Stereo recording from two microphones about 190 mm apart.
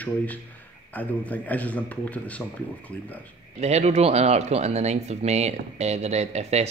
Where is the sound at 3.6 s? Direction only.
35° right (ahead or behind).